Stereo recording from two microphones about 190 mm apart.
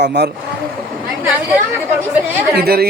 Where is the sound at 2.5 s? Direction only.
55° right (ahead or behind).